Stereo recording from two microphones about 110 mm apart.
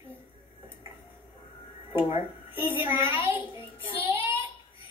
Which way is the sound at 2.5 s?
20° right (ahead or behind).